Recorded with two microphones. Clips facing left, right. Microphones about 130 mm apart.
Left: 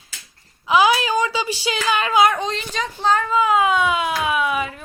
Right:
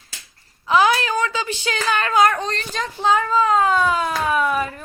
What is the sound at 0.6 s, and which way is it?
Speech, 10° left (ahead or behind).